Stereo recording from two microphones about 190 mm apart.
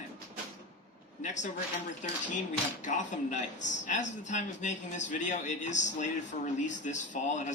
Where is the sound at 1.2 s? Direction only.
40° left (ahead or behind).